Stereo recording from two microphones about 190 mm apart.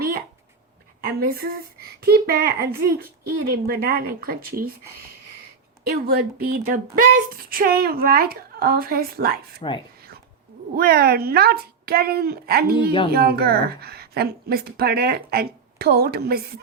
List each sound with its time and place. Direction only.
1.0 s speech: 50° right (ahead or behind)
5.8 s a woman's voice: 55° right (ahead or behind)
9.6 s speech: 25° left (ahead or behind)
10.8 s a woman's voice: 50° right (ahead or behind)